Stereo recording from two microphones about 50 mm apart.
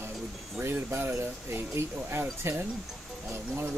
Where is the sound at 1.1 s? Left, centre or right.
Right.